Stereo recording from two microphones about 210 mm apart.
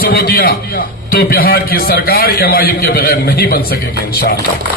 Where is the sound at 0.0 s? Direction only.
45° left (ahead or behind).